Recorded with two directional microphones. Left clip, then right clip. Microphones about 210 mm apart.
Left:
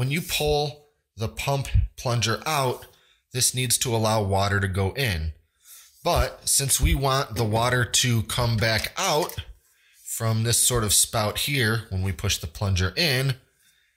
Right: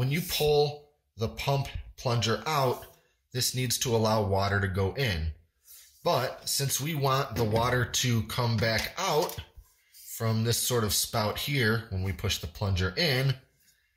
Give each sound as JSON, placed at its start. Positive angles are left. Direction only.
{"t": 0.0, "sound": "speech", "side_deg": 35}